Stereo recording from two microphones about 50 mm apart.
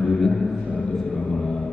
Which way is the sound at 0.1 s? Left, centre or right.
Centre.